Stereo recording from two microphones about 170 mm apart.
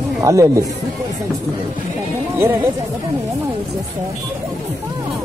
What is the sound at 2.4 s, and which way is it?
Speech, 15° right (ahead or behind).